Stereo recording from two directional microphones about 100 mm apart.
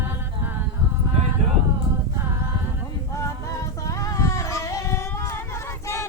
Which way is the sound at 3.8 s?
35° left (ahead or behind).